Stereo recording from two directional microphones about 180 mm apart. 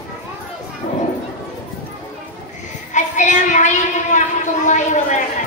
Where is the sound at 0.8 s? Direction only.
45° left (ahead or behind).